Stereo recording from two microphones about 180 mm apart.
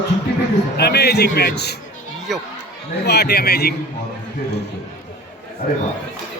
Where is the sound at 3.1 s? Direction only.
65° left (ahead or behind).